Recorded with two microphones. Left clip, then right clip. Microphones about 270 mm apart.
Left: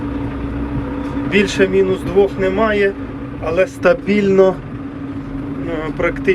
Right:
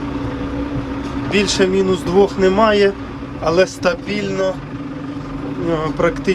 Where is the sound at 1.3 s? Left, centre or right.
Centre.